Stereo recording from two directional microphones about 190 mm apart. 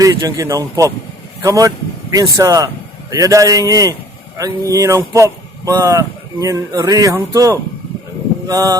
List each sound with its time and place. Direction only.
0.0 s speech: 20° right (ahead or behind)